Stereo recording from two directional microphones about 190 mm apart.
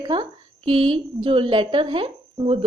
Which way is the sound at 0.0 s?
25° right (ahead or behind).